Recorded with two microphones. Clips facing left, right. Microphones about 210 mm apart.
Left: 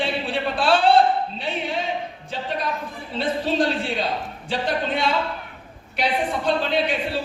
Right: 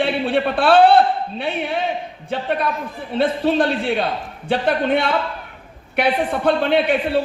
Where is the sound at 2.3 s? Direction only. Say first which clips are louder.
Right 6 dB; 60° right (ahead or behind).